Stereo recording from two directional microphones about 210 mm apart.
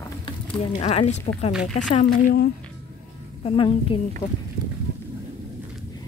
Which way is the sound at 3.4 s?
25° left (ahead or behind).